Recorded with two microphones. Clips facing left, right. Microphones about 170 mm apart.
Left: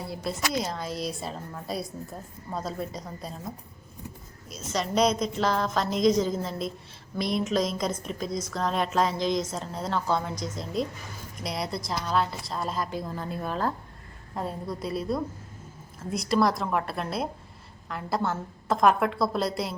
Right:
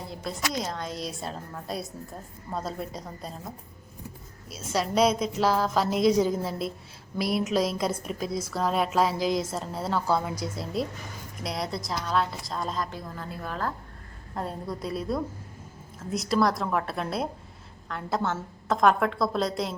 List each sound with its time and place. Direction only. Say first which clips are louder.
0.1 s a woman's voice: left 2 dB; 5° left (ahead or behind)
4.4 s a woman's voice: right 2 dB; 5° right (ahead or behind)
13.1 s speech: left 2 dB; 25° left (ahead or behind)
14.3 s a woman's voice: even; centre (ahead or behind)